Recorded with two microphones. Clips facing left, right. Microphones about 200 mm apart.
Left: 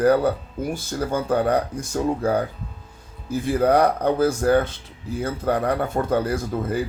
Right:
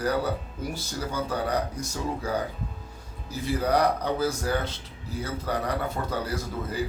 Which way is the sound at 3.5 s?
55° left (ahead or behind).